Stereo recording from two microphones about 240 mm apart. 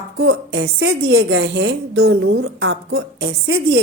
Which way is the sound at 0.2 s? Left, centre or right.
Right.